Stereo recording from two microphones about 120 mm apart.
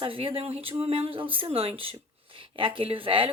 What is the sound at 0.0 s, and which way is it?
Speech, 50° right (ahead or behind).